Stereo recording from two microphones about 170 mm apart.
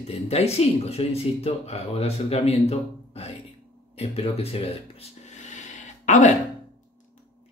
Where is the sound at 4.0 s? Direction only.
35° left (ahead or behind).